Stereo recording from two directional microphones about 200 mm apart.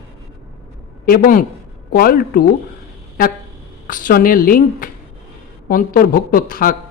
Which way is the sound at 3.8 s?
40° left (ahead or behind).